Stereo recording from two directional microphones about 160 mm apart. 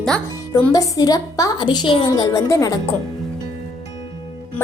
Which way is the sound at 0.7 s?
25° left (ahead or behind).